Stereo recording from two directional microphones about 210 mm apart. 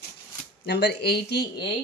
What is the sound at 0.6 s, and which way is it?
A woman's voice, 50° left (ahead or behind).